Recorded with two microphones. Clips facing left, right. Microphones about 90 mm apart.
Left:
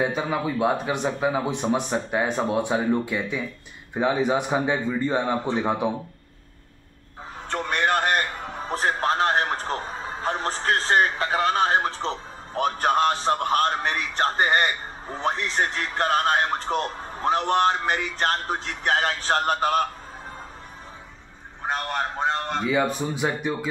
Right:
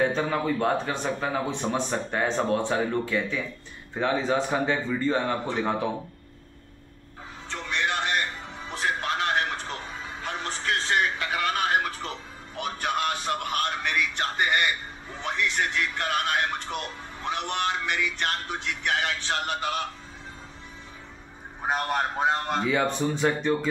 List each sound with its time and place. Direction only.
0.0 s speech: 10° left (ahead or behind)
7.4 s music: 50° left (ahead or behind)
21.6 s a man's voice: 10° right (ahead or behind); by 23.7 s 10° left (ahead or behind)